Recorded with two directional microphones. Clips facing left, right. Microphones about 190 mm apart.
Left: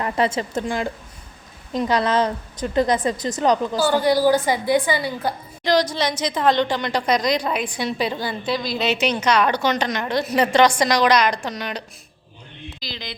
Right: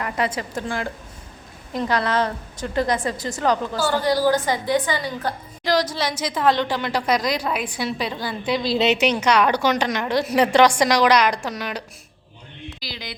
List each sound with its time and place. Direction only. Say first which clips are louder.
0.0 s a woman's voice: left 3 dB; 25° left (ahead or behind); by 5.3 s 10° left (ahead or behind)
5.6 s a woman's voice: left 2 dB; 5° right (ahead or behind)
8.6 s a woman's voice: right 4 dB; 30° right (ahead or behind)
8.9 s a woman's voice: left 2 dB; 15° right (ahead or behind)
12.8 s a woman's voice: left 2 dB; 10° right (ahead or behind)